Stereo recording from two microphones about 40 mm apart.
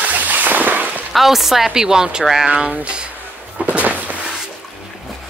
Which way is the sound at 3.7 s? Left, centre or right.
Right.